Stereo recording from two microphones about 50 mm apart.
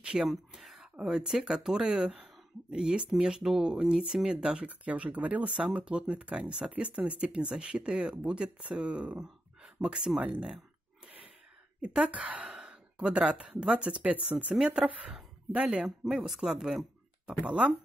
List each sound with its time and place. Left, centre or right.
0.0 s a sound: centre
0.5 s speech: centre
11.8 s speech: right
15.5 s speech: centre
17.4 s speech: right